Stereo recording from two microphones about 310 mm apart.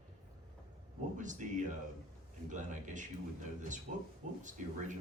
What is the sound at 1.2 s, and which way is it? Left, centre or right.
Speech, right.